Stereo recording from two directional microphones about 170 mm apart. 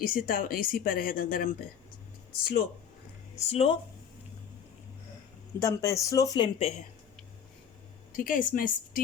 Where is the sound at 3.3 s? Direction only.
35° left (ahead or behind).